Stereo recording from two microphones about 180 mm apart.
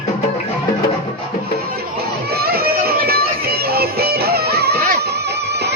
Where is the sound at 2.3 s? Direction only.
60° right (ahead or behind).